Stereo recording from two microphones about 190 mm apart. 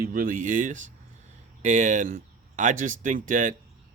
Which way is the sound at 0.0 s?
50° right (ahead or behind).